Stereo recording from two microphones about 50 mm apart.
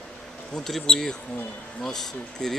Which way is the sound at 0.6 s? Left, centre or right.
Centre.